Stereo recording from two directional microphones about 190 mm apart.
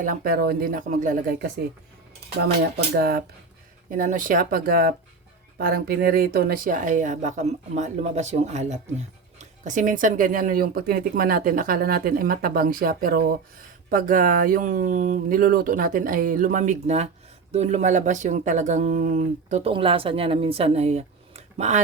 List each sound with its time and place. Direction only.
0.0 s speech: 50° right (ahead or behind)
2.9 s speech: 55° right (ahead or behind); by 21.8 s 35° right (ahead or behind)